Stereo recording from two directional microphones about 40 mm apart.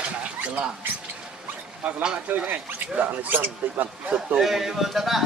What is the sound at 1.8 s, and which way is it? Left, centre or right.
Speech, right.